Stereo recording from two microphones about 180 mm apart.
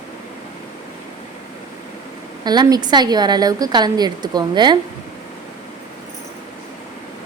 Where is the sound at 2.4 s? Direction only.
25° right (ahead or behind).